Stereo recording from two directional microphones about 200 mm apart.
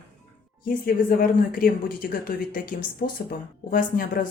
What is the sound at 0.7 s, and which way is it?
A woman's voice, 45° left (ahead or behind).